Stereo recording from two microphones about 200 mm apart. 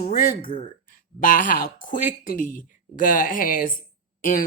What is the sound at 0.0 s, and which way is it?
Speech, 45° left (ahead or behind).